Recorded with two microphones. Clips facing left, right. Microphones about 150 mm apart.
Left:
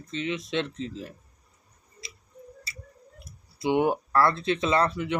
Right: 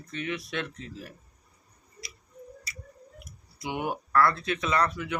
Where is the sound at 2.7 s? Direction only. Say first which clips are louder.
Even; 30° left (ahead or behind).